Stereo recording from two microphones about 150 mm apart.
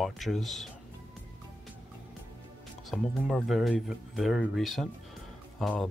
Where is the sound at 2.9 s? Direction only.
Centre (ahead or behind).